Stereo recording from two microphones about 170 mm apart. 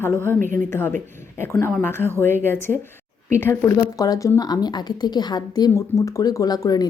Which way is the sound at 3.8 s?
20° left (ahead or behind).